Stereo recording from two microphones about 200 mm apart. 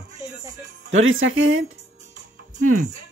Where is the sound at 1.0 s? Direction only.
85° right.